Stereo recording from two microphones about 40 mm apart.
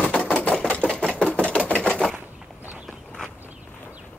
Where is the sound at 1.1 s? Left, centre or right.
Left.